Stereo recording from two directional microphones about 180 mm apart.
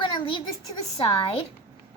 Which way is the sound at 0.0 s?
25° left (ahead or behind).